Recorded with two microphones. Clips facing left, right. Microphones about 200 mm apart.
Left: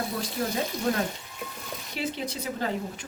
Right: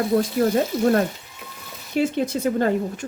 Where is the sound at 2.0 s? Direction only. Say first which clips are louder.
Right 11 dB; 50° right (ahead or behind).